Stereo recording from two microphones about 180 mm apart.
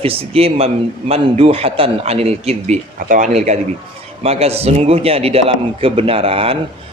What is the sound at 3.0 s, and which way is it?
A man's voice, 50° right (ahead or behind).